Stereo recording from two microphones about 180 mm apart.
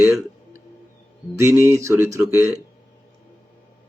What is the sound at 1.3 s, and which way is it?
Speech, 15° right (ahead or behind).